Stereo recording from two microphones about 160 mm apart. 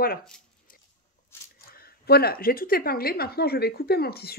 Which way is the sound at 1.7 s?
70° left (ahead or behind).